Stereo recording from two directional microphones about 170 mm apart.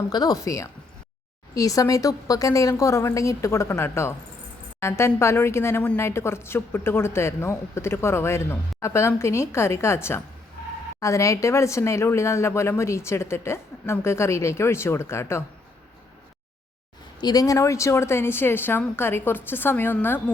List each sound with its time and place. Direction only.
0.1 s a woman's voice: 25° left (ahead or behind)
17.2 s speech: 25° left (ahead or behind)